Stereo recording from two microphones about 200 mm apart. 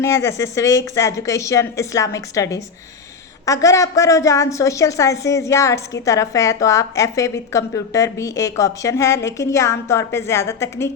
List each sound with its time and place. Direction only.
0.0 s a woman's voice: 15° left (ahead or behind)